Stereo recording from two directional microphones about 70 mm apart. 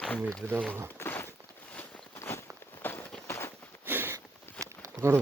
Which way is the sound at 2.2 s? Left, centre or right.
Left.